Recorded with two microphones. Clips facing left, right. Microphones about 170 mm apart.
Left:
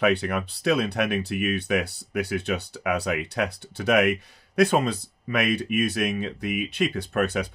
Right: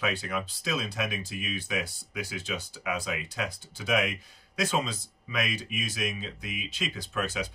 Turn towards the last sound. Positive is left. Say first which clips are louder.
# left 7 dB
turn(degrees=60)  # may be behind; listen again after turning